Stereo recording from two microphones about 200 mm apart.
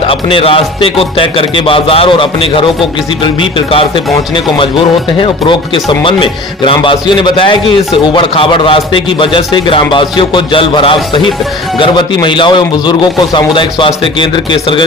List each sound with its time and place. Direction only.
0.1 s a man's voice: 25° left (ahead or behind)
3.7 s a man's voice: 25° left (ahead or behind)
5.2 s a man's voice: 25° left (ahead or behind)